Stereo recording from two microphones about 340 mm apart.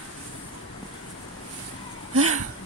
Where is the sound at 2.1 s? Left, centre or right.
Right.